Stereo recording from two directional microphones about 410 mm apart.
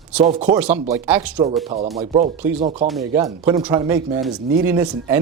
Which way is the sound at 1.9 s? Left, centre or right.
Centre.